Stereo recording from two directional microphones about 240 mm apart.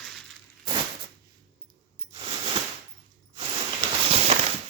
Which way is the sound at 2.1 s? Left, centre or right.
Right.